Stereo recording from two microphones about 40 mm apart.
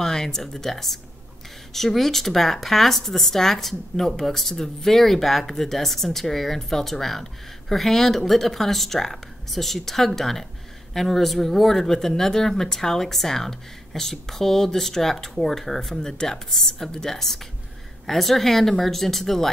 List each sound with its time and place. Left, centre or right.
0.0 s speech: centre